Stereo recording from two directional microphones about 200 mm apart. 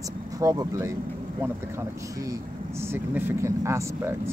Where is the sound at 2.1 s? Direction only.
15° right (ahead or behind).